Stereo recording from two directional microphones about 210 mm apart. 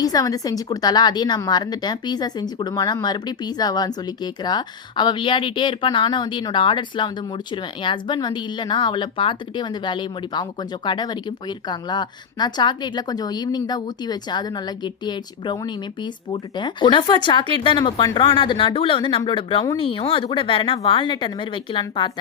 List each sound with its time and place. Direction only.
0.0 s a woman's voice: 15° left (ahead or behind)